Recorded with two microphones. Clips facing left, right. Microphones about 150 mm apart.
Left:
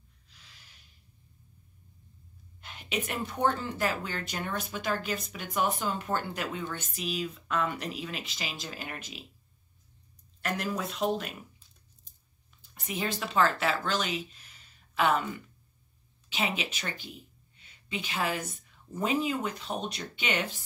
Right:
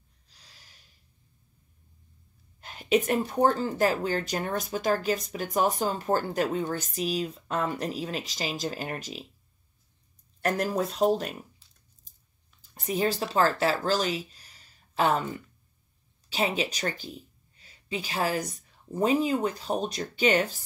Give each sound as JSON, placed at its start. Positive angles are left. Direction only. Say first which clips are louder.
{"t": 0.3, "sound": "gasp", "louder": "right 1 dB", "side_deg": -40}
{"t": 2.6, "sound": "speech", "louder": "right 10 dB", "side_deg": -40}
{"t": 10.4, "sound": "speech", "louder": "right 6 dB", "side_deg": -40}
{"t": 12.7, "sound": "a woman's voice", "louder": "right 7 dB", "side_deg": -40}